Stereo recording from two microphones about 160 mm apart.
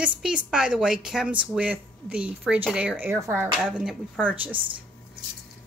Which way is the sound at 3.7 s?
Centre (ahead or behind).